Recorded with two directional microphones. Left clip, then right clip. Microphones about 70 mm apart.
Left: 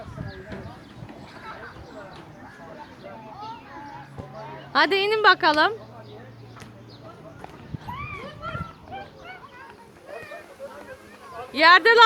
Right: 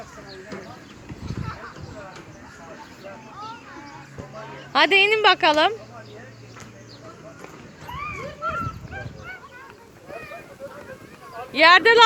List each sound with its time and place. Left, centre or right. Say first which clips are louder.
4.7 s speech: right 4 dB; centre
8.2 s a sound: right 6 dB; left
11.5 s speech: right 1 dB; centre